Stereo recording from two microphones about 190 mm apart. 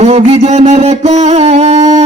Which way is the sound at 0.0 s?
35° right (ahead or behind).